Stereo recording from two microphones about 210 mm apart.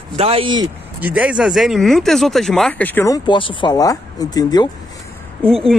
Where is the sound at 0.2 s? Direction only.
25° right (ahead or behind).